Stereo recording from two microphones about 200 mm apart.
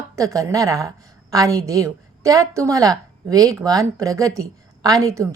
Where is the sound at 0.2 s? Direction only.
15° right (ahead or behind).